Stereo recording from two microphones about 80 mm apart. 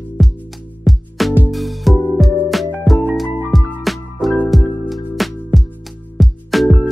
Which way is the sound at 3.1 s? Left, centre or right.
Centre.